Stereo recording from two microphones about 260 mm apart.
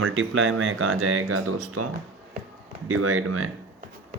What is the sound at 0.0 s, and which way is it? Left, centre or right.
Speech, right.